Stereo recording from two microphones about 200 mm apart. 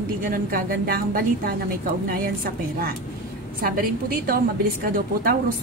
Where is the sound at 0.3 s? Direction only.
45° right (ahead or behind).